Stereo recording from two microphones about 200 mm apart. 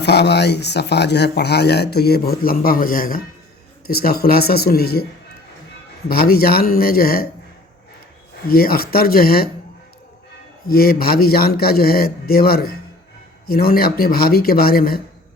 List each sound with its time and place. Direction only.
0.0 s a man's voice: 55° left (ahead or behind)
6.1 s a man's voice: 50° left (ahead or behind)
8.4 s a man's voice: 50° left (ahead or behind)
10.7 s a man's voice: 50° left (ahead or behind)